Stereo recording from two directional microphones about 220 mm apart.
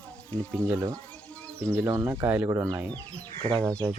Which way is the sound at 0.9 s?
5° left (ahead or behind).